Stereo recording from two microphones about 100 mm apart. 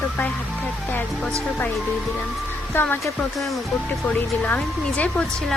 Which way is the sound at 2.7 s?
20° left (ahead or behind).